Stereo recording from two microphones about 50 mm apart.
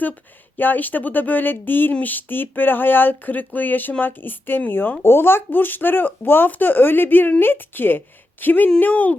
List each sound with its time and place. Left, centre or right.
0.5 s speech: left